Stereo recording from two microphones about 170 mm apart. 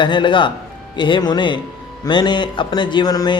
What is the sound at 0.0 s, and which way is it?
A man's voice, 30° left (ahead or behind).